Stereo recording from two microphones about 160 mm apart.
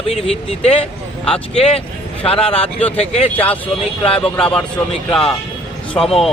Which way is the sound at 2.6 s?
10° left (ahead or behind).